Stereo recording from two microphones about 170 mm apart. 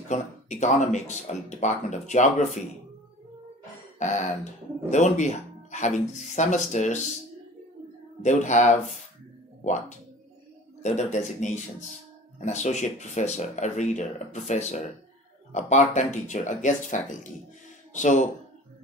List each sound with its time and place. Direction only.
0.1 s speech: 45° left (ahead or behind)
4.0 s speech: 45° left (ahead or behind)
8.2 s speech: 45° left (ahead or behind)